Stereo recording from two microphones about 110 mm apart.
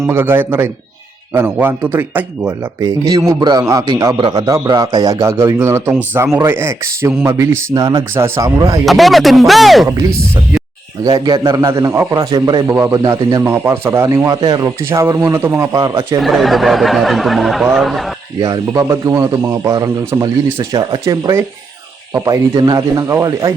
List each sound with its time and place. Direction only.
0.1 s speech: 20° right (ahead or behind)
2.8 s a man's voice: 35° right (ahead or behind)
4.2 s a man's voice: 40° right (ahead or behind)
8.9 s speech: centre (ahead or behind)
11.0 s a man's voice: 35° right (ahead or behind)
12.6 s speech: 20° right (ahead or behind)
12.9 s speech: 35° right (ahead or behind)
14.3 s a man's voice: 35° right (ahead or behind)
14.8 s speech: 20° right (ahead or behind)
16.2 s speech: centre (ahead or behind)
18.3 s a man's voice: 35° right (ahead or behind)